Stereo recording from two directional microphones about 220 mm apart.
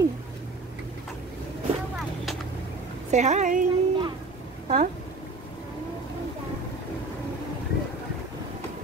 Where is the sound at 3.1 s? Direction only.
30° right (ahead or behind).